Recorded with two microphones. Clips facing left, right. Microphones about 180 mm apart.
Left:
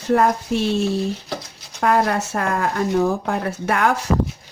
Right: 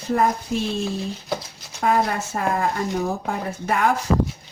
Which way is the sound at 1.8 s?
75° left (ahead or behind).